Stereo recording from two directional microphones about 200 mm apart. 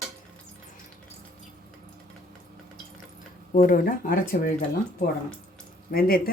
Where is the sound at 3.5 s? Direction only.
45° left (ahead or behind).